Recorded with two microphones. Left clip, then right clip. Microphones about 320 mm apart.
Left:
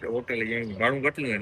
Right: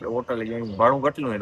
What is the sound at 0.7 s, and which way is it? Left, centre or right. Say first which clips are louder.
Speech: right 7 dB; right.